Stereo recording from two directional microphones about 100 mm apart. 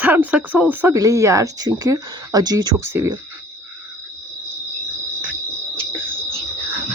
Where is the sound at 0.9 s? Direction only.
35° right (ahead or behind).